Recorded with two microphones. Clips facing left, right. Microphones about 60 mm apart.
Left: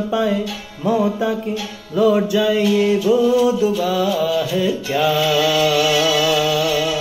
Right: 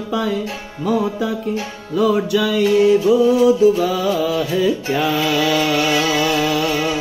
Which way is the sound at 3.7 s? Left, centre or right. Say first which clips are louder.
Right 2 dB; right.